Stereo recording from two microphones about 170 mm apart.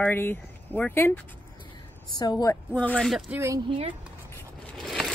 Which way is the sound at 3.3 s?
15° right (ahead or behind).